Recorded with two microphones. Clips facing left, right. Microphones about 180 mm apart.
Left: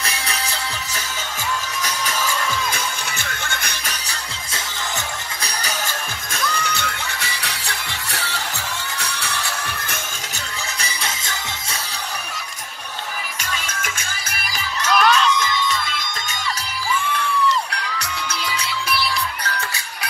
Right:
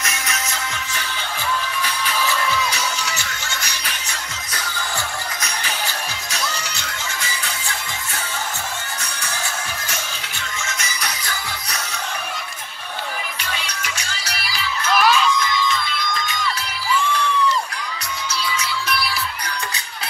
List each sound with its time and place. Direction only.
0.0 s music: 35° left (ahead or behind)
1.8 s music: 45° left (ahead or behind)
4.1 s music: 25° left (ahead or behind)
5.4 s music: 40° left (ahead or behind); by 8.4 s 75° left (ahead or behind)
9.0 s music: 65° left (ahead or behind)
10.8 s music: 30° left (ahead or behind)
13.4 s music: 45° left (ahead or behind)
15.0 s crowd: 5° right (ahead or behind)